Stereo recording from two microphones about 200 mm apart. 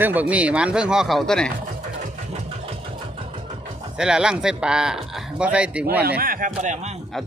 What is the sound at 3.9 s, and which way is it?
Speech, 5° right (ahead or behind).